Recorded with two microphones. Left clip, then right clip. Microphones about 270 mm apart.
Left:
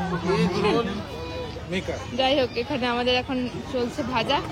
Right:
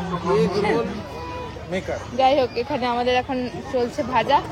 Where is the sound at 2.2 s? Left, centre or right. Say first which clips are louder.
Right 4 dB; centre.